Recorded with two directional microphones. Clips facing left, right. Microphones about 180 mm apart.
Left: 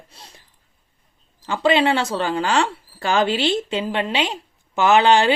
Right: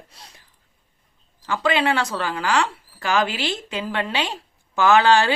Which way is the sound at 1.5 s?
25° left (ahead or behind).